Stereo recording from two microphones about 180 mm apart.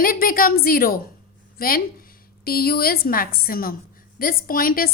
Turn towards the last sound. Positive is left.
turn(degrees=55)  # may be behind; listen again after turning